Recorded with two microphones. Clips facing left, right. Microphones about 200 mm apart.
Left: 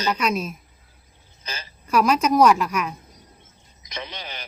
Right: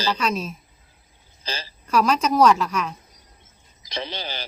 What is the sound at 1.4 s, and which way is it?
Speech, 30° right (ahead or behind).